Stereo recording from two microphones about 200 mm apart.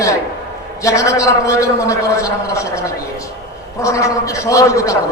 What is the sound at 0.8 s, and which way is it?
A man's voice, 15° left (ahead or behind).